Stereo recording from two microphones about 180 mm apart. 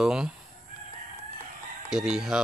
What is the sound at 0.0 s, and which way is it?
Speech, 5° right (ahead or behind).